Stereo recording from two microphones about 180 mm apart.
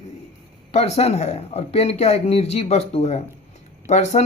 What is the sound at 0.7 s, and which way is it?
Speech, 35° left (ahead or behind).